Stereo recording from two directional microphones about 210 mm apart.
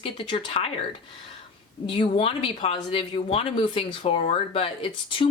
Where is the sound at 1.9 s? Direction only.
25° left (ahead or behind).